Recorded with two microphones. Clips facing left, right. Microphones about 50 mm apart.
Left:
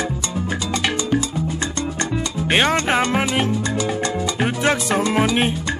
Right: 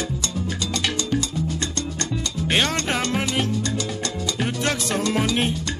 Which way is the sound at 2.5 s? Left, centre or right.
Left.